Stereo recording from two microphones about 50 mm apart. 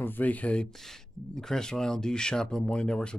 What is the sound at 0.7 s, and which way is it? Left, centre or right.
Speech, centre.